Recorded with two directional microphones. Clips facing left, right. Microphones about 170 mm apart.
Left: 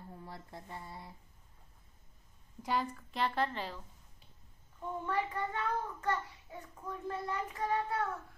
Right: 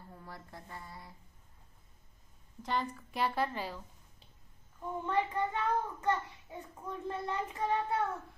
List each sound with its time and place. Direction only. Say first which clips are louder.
0.2 s speech: left 1 dB; 25° left (ahead or behind)
2.6 s a woman's voice: even; 5° left (ahead or behind)
3.1 s a woman's voice: right 1 dB; 10° right (ahead or behind)
5.0 s a child's voice: right 4 dB; 20° right (ahead or behind)